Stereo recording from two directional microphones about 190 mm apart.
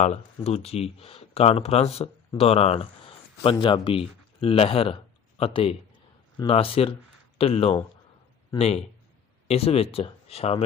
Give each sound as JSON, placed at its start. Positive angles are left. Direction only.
{"t": 0.4, "sound": "speech", "side_deg": 35}